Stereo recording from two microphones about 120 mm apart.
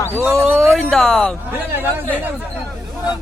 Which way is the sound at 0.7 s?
5° left (ahead or behind).